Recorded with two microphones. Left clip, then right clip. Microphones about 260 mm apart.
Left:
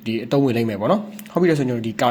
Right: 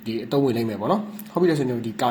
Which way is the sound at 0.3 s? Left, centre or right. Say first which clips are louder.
Left 3 dB; left.